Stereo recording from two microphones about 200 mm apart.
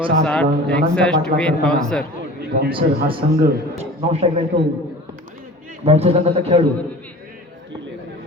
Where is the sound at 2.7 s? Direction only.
25° right (ahead or behind).